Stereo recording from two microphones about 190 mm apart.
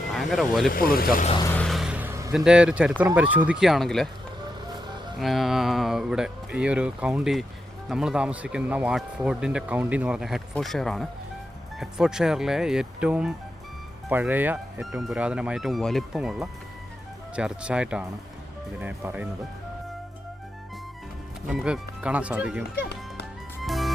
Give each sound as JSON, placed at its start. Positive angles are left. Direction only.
{"t": 0.1, "sound": "speech", "side_deg": 0}
{"t": 0.7, "sound": "speech", "side_deg": 50}
{"t": 1.4, "sound": "speech", "side_deg": 10}
{"t": 1.6, "sound": "a sound", "side_deg": 0}
{"t": 2.3, "sound": "speech", "side_deg": -5}
{"t": 5.2, "sound": "speech", "side_deg": 0}
{"t": 21.4, "sound": "speech", "side_deg": -5}
{"t": 23.6, "sound": "music", "side_deg": 0}